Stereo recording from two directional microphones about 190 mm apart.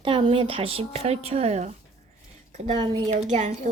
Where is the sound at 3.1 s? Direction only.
40° right (ahead or behind).